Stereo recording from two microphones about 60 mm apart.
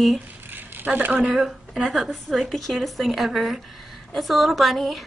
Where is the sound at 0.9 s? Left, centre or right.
Right.